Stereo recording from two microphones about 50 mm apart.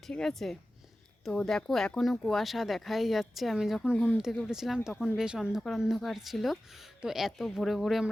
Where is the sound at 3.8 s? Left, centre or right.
Centre.